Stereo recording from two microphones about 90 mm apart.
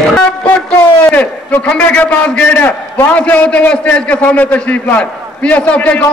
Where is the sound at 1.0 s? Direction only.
15° left (ahead or behind).